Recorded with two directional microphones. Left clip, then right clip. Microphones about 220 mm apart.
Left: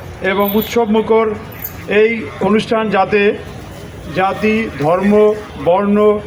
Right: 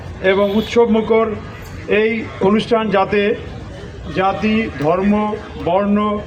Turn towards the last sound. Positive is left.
turn(degrees=50)  # may be behind; listen again after turning